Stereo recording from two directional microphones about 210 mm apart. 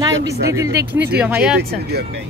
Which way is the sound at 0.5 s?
15° right (ahead or behind).